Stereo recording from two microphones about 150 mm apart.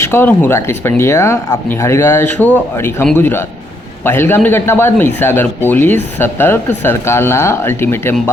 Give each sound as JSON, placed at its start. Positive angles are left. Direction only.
{"t": 0.0, "sound": "speech", "side_deg": 15}